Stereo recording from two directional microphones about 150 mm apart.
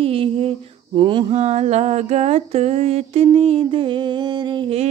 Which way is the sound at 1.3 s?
50° right (ahead or behind).